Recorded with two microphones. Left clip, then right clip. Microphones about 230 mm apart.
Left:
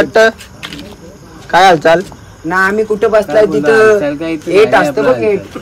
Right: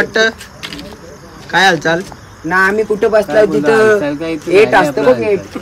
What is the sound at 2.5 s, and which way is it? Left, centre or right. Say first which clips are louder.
Speech: even; right.